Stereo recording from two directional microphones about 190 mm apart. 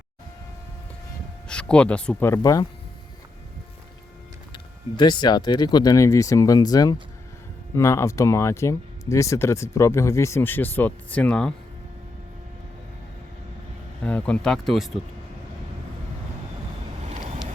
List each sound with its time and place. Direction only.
1.5 s speech: 5° left (ahead or behind)
4.5 s speech: 25° left (ahead or behind); by 11.5 s 5° left (ahead or behind)
14.0 s speech: 5° left (ahead or behind)